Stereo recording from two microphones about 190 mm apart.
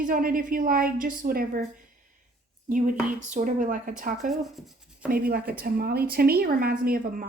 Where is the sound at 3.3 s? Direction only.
45° right (ahead or behind).